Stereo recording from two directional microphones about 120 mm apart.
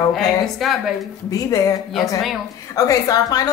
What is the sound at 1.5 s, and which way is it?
Speech, 30° left (ahead or behind).